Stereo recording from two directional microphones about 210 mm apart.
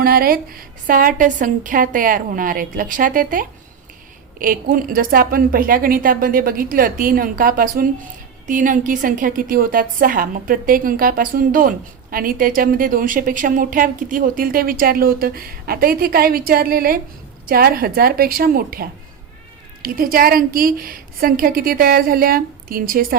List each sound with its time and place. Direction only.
0.0 s a woman's voice: 45° right (ahead or behind)